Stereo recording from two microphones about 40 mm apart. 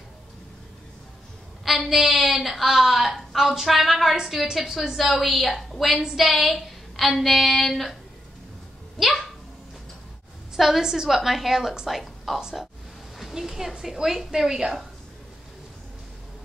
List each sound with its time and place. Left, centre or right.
1.6 s a woman's voice: centre
8.9 s speech: centre
10.5 s a woman's voice: centre
12.4 s a woman's voice: centre